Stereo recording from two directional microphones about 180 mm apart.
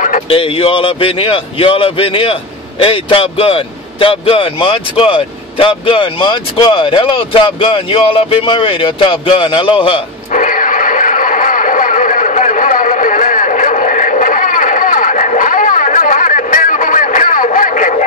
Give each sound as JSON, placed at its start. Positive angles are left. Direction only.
{"t": 0.3, "sound": "a man's voice", "side_deg": 30}
{"t": 10.3, "sound": "radio", "side_deg": 45}